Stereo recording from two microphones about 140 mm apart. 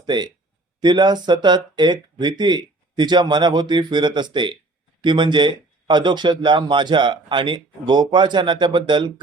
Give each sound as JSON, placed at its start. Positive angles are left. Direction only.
{"t": 0.0, "sound": "speech", "side_deg": -30}